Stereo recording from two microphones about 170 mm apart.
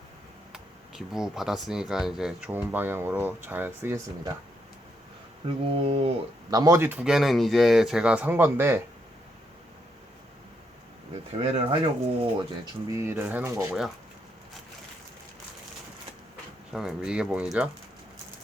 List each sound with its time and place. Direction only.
0.5 s speech: centre (ahead or behind)
5.6 s speech: 30° right (ahead or behind)
6.5 s speech: 20° right (ahead or behind)
11.4 s speech: 35° right (ahead or behind)
12.9 s speech: 15° right (ahead or behind)
16.7 s speech: 5° right (ahead or behind)